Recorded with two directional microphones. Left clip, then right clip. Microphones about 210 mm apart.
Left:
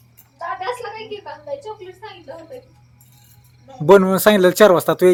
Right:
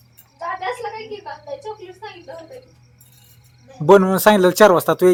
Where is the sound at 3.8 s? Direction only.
5° left (ahead or behind).